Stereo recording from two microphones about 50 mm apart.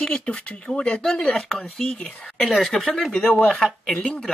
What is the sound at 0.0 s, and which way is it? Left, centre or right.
Speech, centre.